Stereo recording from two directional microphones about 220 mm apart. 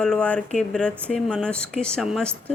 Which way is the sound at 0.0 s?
5° left (ahead or behind).